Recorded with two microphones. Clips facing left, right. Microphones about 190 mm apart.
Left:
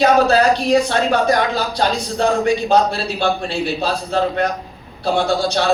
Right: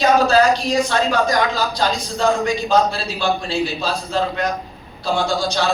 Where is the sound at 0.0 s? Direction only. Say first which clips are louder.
Left 1 dB; 60° left (ahead or behind).